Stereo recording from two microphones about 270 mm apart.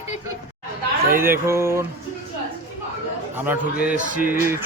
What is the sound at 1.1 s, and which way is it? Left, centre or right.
Speech, centre.